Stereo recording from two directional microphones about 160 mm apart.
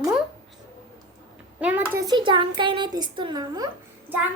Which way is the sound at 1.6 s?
10° right (ahead or behind).